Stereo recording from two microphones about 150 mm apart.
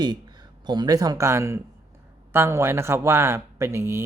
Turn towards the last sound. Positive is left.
turn(degrees=-20)  # may be behind; listen again after turning